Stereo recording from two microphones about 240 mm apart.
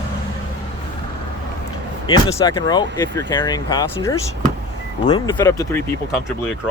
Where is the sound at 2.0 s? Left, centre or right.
Centre.